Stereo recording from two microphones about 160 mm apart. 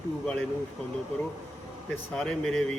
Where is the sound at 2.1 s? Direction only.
5° left (ahead or behind).